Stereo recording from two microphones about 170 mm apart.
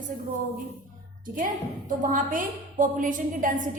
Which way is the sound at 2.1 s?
50° right (ahead or behind).